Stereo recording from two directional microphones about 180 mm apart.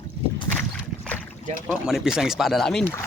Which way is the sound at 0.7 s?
5° left (ahead or behind).